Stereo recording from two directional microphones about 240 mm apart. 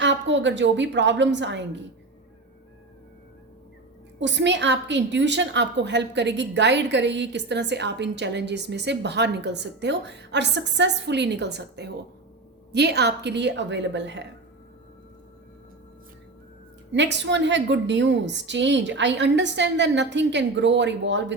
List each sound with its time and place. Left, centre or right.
0.0 s a woman's voice: right
4.2 s a woman's voice: right
16.9 s a woman's voice: right